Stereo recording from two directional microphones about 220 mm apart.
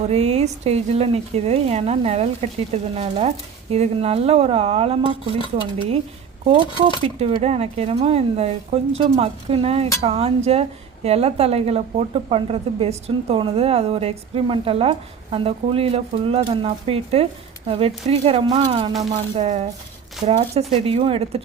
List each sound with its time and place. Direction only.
0.1 s speech: 30° right (ahead or behind)
6.4 s speech: 25° right (ahead or behind)